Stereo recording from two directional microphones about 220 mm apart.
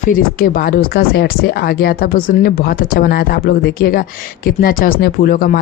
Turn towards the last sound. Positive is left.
turn(degrees=40)  # may be behind; listen again after turning